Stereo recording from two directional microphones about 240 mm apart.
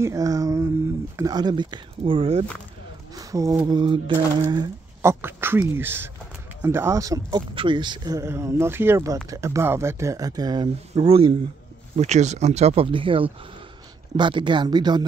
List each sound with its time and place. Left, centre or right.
0.0 s speech: centre